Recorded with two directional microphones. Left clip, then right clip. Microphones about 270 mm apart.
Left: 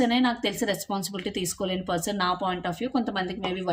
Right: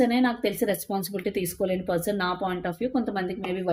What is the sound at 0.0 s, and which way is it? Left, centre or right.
A woman's voice, centre.